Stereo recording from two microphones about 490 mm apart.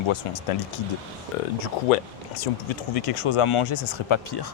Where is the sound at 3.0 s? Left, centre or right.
Left.